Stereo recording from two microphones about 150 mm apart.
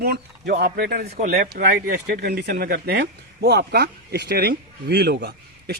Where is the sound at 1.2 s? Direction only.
60° right (ahead or behind).